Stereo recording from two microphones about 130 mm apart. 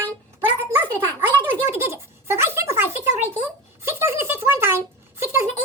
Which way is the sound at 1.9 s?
20° right (ahead or behind).